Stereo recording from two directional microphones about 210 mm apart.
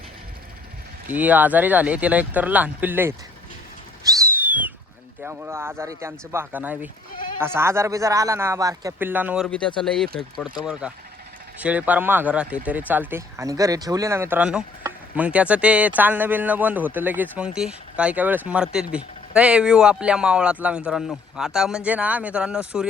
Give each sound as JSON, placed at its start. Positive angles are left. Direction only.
{"t": 1.0, "sound": "speech", "side_deg": -10}
{"t": 4.0, "sound": "a sound", "side_deg": -15}
{"t": 5.2, "sound": "speech", "side_deg": -10}
{"t": 9.5, "sound": "speech", "side_deg": 5}